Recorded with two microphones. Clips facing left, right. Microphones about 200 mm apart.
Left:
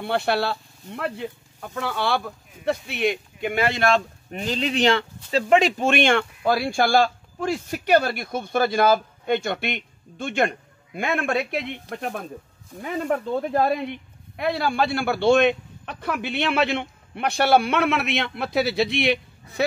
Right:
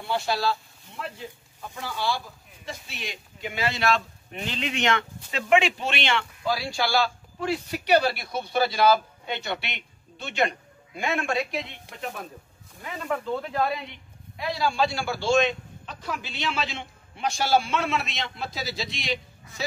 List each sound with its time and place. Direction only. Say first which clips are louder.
0.0 s a man's voice: left 4 dB; 60° left (ahead or behind)
13.1 s a man's voice: left 4 dB; 45° left (ahead or behind); by 19.1 s 60° left (ahead or behind)